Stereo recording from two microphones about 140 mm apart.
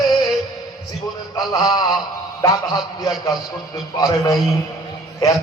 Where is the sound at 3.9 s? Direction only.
25° left (ahead or behind).